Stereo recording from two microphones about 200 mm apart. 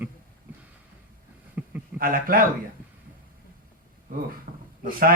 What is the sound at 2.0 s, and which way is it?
Speech, 45° right (ahead or behind).